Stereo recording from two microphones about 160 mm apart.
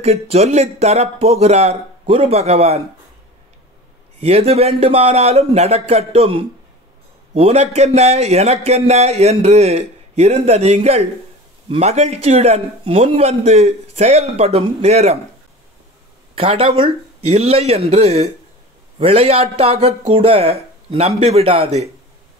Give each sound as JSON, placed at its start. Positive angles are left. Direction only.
{"t": 0.0, "sound": "a man's voice", "side_deg": -40}
{"t": 4.2, "sound": "a man's voice", "side_deg": -40}
{"t": 16.3, "sound": "a man's voice", "side_deg": -35}